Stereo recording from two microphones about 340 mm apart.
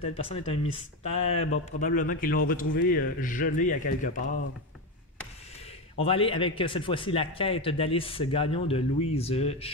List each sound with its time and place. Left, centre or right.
0.0 s a man's voice: centre
5.9 s speech: centre